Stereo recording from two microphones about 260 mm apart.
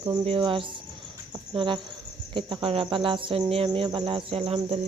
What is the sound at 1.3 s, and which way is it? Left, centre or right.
Speech, centre.